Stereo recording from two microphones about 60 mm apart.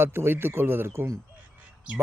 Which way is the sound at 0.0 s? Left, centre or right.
Right.